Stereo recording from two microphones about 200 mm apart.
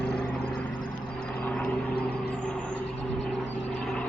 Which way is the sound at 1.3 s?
5° left (ahead or behind).